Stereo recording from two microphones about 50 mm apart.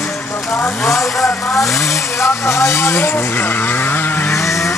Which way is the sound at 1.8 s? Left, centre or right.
Left.